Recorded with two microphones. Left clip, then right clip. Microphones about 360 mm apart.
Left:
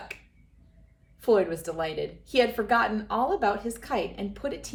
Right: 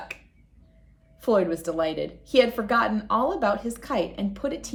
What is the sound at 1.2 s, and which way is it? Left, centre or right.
A woman's voice, centre.